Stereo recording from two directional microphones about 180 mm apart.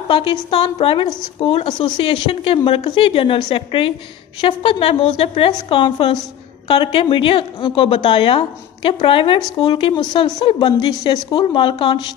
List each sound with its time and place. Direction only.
0.1 s a woman's voice: 30° left (ahead or behind)